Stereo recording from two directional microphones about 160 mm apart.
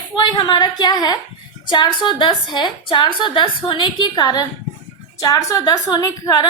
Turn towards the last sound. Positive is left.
turn(degrees=25)  # may be behind; listen again after turning